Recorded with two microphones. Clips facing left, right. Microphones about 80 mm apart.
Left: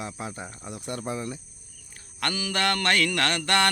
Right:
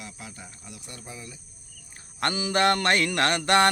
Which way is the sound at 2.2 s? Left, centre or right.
Right.